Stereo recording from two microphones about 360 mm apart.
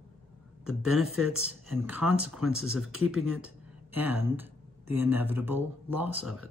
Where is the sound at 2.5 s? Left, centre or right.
Right.